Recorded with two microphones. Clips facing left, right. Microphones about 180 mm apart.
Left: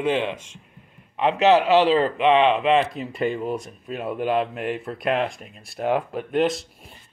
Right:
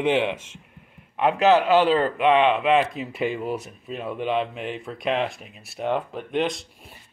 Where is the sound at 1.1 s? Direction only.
Centre (ahead or behind).